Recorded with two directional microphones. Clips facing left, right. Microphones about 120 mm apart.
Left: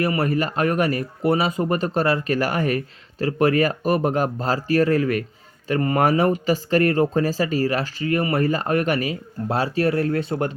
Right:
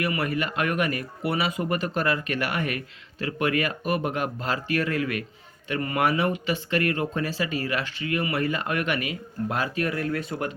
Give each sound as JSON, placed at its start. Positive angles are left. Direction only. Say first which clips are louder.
{"t": 0.0, "sound": "speech", "louder": "left 5 dB", "side_deg": 35}